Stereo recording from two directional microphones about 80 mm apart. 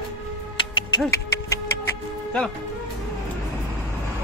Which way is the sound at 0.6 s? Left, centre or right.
Left.